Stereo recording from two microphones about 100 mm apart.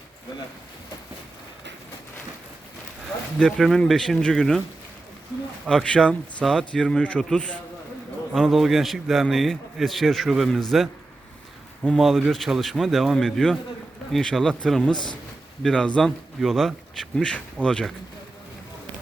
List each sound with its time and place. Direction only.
3.3 s a man's voice: 5° left (ahead or behind)
5.6 s speech: 10° left (ahead or behind)
8.3 s a man's voice: centre (ahead or behind)
11.9 s a man's voice: centre (ahead or behind)
14.9 s a man's voice: 50° left (ahead or behind)
15.6 s a man's voice: 10° left (ahead or behind)